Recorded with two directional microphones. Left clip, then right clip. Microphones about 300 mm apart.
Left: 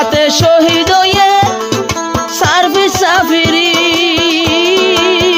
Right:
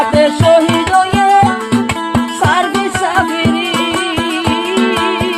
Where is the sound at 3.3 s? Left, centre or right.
Left.